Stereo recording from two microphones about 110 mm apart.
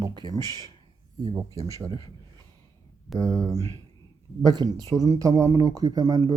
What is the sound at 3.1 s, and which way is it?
Speech, 35° right (ahead or behind).